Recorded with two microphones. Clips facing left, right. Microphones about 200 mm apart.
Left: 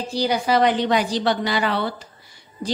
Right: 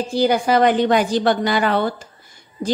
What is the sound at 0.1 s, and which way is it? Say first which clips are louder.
A woman's voice: right 3 dB; 50° right (ahead or behind).